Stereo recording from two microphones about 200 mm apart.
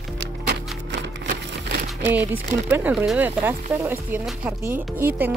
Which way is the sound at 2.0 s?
10° right (ahead or behind).